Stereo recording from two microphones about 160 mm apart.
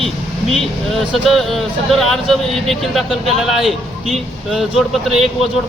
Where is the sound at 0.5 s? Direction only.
Centre (ahead or behind).